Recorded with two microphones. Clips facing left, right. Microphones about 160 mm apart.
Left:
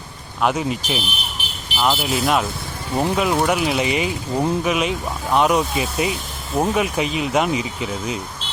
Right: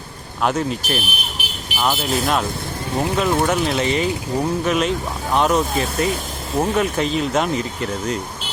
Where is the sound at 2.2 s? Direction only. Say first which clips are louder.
Left 1 dB; 5° left (ahead or behind).